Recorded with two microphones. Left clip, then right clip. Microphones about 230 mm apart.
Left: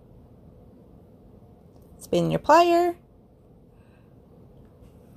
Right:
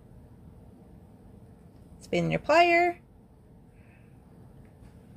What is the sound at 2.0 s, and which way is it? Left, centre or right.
Speech, left.